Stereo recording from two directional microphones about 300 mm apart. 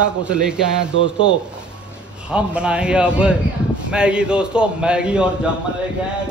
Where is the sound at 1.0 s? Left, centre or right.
Centre.